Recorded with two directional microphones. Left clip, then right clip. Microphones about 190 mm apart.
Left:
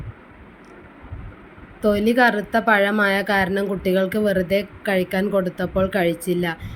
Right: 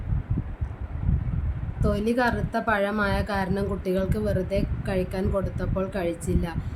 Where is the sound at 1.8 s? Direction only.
20° left (ahead or behind).